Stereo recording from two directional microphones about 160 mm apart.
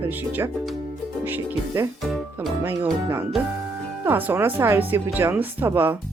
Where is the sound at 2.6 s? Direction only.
15° right (ahead or behind).